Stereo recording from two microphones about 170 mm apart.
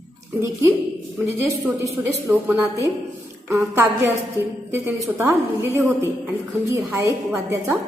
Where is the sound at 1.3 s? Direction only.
15° right (ahead or behind).